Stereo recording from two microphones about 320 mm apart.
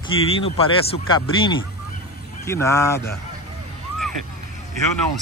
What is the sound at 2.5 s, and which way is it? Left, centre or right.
Speech, centre.